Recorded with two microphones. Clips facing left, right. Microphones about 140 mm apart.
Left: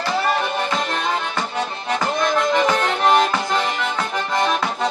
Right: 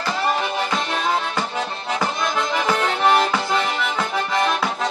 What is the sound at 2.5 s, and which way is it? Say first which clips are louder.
Accordion: left 3 dB; 5° right (ahead or behind).